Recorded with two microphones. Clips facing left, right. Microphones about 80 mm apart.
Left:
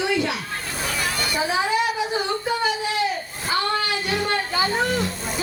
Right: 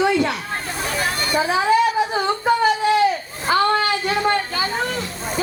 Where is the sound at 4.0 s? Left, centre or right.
Right.